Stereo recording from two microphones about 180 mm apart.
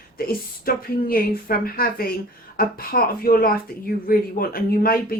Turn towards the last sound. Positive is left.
turn(degrees=55)  # may be behind; listen again after turning